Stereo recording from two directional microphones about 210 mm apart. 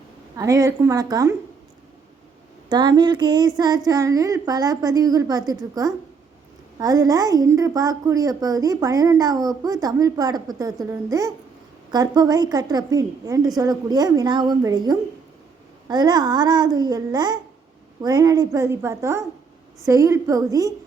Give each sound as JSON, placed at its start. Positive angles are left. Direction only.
{"t": 0.3, "sound": "a woman's voice", "side_deg": -15}
{"t": 2.6, "sound": "a woman's voice", "side_deg": -20}